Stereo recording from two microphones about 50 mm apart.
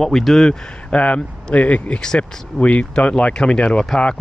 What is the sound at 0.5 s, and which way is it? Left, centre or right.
Speech, left.